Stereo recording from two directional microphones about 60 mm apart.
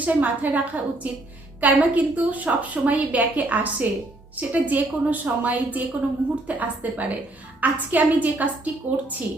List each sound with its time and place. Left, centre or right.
0.0 s a woman's voice: right